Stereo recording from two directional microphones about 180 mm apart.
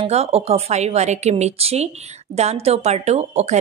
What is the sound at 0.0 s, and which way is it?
A woman's voice, 35° right (ahead or behind).